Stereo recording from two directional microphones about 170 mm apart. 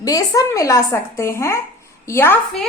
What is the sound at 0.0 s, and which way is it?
A woman's voice, 20° left (ahead or behind).